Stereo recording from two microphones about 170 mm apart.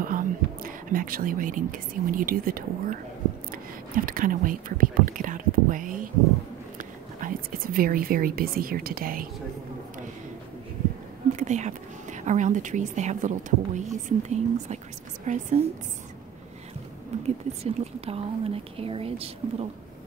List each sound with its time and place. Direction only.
0.0 s speech: 55° right (ahead or behind)
11.3 s speech: 45° right (ahead or behind)
17.1 s a sound: 40° right (ahead or behind)
17.6 s speech: 35° right (ahead or behind)